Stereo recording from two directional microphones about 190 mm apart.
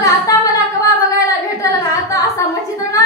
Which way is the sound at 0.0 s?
15° left (ahead or behind).